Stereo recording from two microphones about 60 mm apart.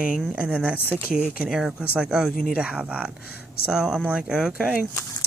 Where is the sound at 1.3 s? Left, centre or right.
Centre.